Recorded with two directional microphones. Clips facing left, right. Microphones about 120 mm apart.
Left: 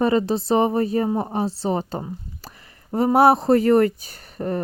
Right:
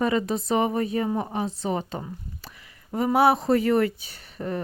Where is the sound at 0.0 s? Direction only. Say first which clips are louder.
Left 4 dB; 35° left (ahead or behind).